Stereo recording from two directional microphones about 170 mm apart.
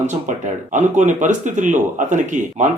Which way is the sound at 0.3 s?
45° right (ahead or behind).